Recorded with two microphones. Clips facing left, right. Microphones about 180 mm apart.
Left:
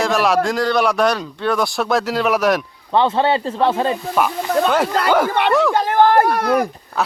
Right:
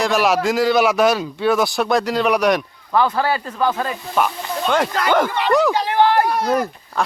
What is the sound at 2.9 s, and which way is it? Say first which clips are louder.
Speech: left 2 dB; 25° left (ahead or behind).